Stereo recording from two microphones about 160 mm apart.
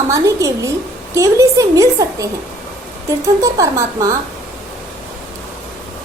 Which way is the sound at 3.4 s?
20° right (ahead or behind).